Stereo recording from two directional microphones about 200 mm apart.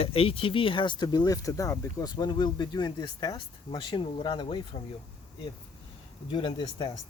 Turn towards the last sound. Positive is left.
turn(degrees=20)  # may be behind; listen again after turning